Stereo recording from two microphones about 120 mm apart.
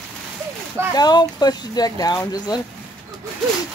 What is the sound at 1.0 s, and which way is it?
Speech, 35° left (ahead or behind).